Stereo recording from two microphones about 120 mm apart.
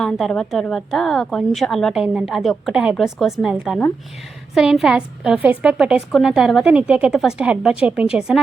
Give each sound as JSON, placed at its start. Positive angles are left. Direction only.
{"t": 0.0, "sound": "a woman's voice", "side_deg": 5}